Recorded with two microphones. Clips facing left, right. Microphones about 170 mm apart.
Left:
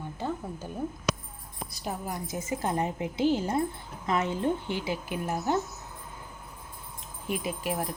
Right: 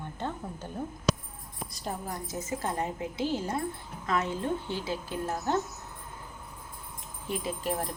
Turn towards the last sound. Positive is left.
turn(degrees=10)  # may be behind; listen again after turning